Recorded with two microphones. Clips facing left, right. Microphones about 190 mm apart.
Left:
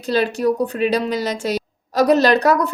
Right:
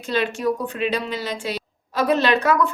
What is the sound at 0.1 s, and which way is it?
A woman's voice, 35° left (ahead or behind).